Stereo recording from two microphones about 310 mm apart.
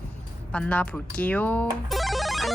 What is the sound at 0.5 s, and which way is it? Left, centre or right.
Speech, centre.